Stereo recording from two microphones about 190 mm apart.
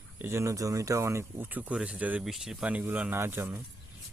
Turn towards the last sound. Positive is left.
turn(degrees=-10)  # may be behind; listen again after turning